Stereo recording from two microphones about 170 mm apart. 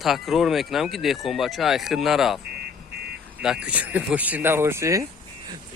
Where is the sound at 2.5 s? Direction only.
70° right (ahead or behind).